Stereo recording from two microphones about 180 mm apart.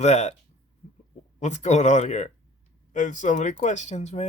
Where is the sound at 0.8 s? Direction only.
35° left (ahead or behind).